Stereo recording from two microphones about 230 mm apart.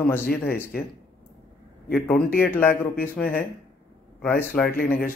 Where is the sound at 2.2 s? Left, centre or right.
Left.